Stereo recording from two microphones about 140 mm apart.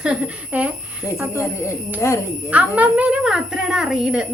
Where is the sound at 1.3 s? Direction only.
20° left (ahead or behind).